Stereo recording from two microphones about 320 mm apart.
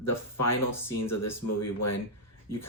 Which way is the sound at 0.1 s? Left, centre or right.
Left.